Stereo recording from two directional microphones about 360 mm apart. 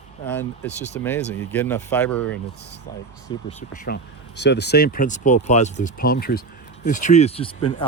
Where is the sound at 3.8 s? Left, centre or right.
Left.